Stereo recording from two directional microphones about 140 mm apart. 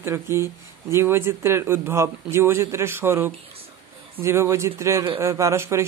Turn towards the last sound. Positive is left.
turn(degrees=-20)  # may be behind; listen again after turning